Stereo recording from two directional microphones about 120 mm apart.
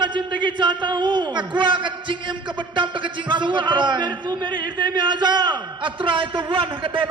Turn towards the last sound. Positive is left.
turn(degrees=-45)  # may be behind; listen again after turning